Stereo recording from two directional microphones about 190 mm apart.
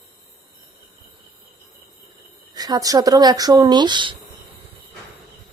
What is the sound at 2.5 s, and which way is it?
Speech, 20° right (ahead or behind).